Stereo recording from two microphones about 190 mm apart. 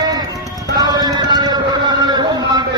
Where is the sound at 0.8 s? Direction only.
20° right (ahead or behind).